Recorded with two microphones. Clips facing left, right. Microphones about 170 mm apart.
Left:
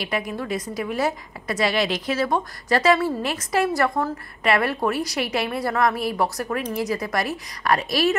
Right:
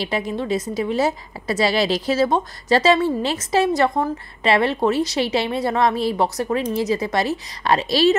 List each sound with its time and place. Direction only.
0.0 s a woman's voice: 25° right (ahead or behind)